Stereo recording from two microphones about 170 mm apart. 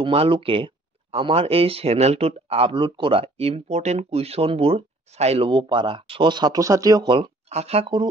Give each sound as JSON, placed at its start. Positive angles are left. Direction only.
{"t": 0.0, "sound": "speech", "side_deg": -30}